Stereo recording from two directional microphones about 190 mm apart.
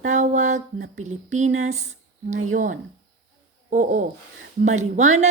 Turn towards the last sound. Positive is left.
turn(degrees=-40)  # may be behind; listen again after turning